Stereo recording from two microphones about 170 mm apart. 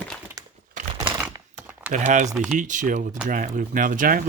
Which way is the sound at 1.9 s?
45° right (ahead or behind).